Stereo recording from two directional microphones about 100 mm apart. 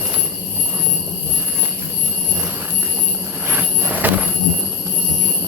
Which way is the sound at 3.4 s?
20° right (ahead or behind).